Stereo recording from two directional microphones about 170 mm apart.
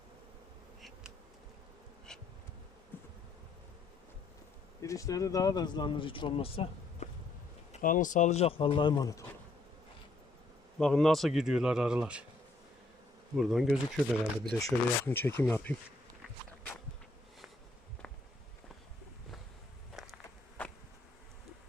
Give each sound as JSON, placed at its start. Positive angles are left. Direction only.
{"t": 0.8, "sound": "insect", "side_deg": 0}
{"t": 2.1, "sound": "bee", "side_deg": 5}
{"t": 4.8, "sound": "speech", "side_deg": 20}
{"t": 7.7, "sound": "speech", "side_deg": 50}
{"t": 10.8, "sound": "speech", "side_deg": 5}
{"t": 13.3, "sound": "speech", "side_deg": 0}
{"t": 14.6, "sound": "speech", "side_deg": 15}
{"t": 18.0, "sound": "walk", "side_deg": 5}
{"t": 20.0, "sound": "insect", "side_deg": -5}